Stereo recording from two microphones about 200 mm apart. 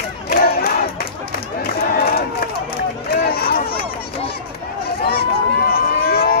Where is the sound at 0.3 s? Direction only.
50° left (ahead or behind).